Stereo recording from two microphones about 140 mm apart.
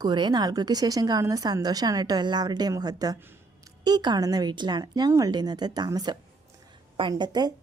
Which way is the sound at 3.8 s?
30° right (ahead or behind).